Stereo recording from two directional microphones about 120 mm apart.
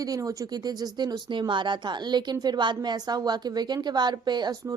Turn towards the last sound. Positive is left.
turn(degrees=-35)  # may be behind; listen again after turning